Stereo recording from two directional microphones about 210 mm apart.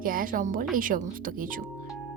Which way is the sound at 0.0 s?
40° right (ahead or behind).